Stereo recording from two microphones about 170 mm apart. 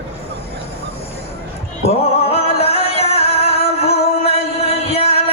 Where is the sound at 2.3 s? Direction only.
35° left (ahead or behind).